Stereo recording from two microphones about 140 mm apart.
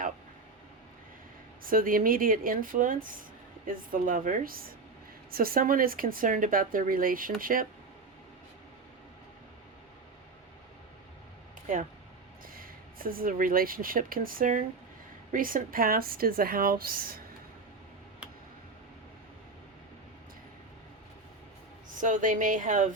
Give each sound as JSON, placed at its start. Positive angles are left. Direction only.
{"t": 1.6, "sound": "speech", "side_deg": -85}
{"t": 12.5, "sound": "speech", "side_deg": -90}
{"t": 21.8, "sound": "speech", "side_deg": -70}